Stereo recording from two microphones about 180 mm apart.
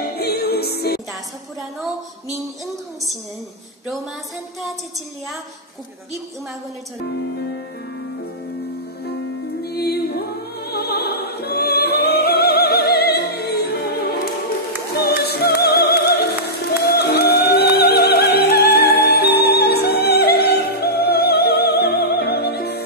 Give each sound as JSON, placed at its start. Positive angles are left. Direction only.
{"t": 0.0, "sound": "music", "side_deg": 60}
{"t": 9.6, "sound": "music", "side_deg": 60}